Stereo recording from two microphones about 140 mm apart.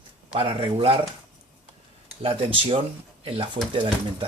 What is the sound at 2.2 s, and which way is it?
Speech, 40° right (ahead or behind).